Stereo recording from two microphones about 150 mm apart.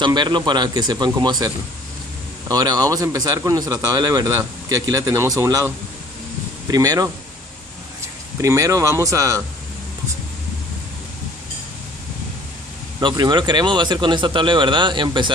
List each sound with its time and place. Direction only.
0.0 s a man's voice: 30° right (ahead or behind)
6.7 s a man's voice: 25° right (ahead or behind)
8.4 s a man's voice: 20° right (ahead or behind)
13.0 s speech: 30° right (ahead or behind)